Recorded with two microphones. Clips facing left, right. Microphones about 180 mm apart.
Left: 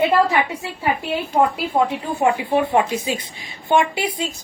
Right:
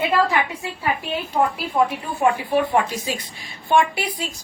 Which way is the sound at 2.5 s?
25° left (ahead or behind).